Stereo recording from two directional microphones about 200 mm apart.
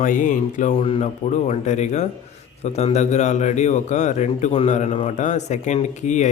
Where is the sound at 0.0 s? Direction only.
40° left (ahead or behind).